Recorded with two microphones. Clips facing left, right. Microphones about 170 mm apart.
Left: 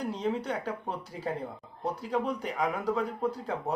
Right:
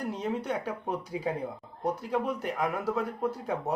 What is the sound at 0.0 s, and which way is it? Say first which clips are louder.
A man's voice: left 1 dB; 10° right (ahead or behind).